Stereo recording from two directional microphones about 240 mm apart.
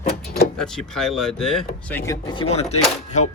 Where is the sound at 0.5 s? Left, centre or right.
Centre.